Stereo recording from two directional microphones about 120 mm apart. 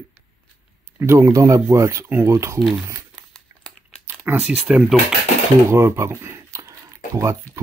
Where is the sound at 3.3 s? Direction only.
5° left (ahead or behind).